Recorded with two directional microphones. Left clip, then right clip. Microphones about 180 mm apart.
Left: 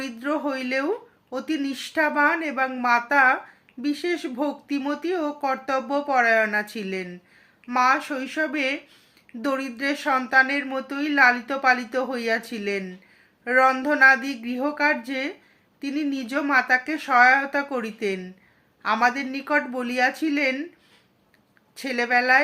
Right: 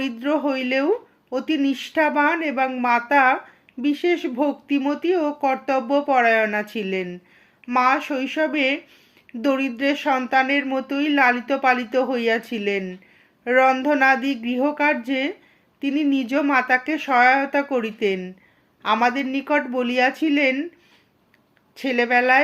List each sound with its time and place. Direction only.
0.0 s speech: 45° right (ahead or behind)
21.8 s speech: 45° right (ahead or behind)